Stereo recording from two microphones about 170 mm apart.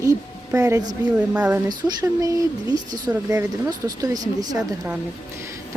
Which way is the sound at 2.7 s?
20° right (ahead or behind).